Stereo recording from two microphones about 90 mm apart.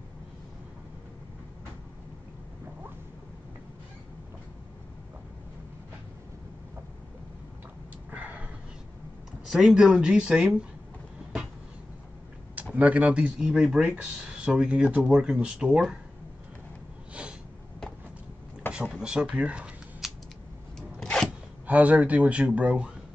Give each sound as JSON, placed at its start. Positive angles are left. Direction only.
{"t": 8.1, "sound": "a sound", "side_deg": -15}
{"t": 9.5, "sound": "speech", "side_deg": -5}
{"t": 12.7, "sound": "speech", "side_deg": -15}
{"t": 17.1, "sound": "snort", "side_deg": -10}
{"t": 18.9, "sound": "speech", "side_deg": -10}
{"t": 21.0, "sound": "a sound", "side_deg": 5}
{"t": 21.6, "sound": "speech", "side_deg": -15}